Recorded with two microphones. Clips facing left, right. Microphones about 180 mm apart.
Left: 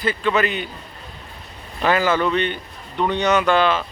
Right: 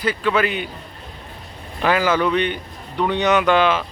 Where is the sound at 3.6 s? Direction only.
10° right (ahead or behind).